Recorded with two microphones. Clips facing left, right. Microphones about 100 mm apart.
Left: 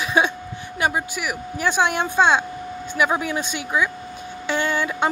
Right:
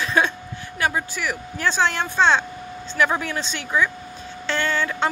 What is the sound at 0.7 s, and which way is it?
Speech, 20° left (ahead or behind).